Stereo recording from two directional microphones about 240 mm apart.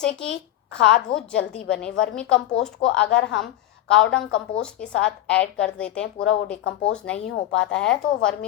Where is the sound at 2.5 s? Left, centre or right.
Left.